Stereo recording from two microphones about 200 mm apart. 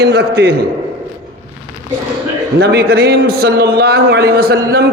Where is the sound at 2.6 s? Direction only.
55° right (ahead or behind).